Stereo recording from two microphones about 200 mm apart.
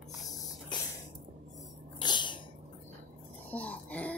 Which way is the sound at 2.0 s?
20° left (ahead or behind).